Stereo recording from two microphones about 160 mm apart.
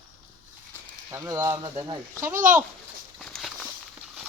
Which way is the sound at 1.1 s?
20° right (ahead or behind).